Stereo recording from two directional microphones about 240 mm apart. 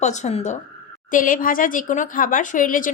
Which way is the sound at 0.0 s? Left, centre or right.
Left.